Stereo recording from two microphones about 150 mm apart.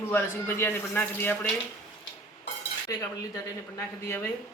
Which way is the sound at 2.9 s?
25° left (ahead or behind).